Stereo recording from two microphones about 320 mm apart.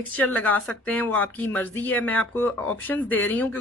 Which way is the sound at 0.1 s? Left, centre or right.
Centre.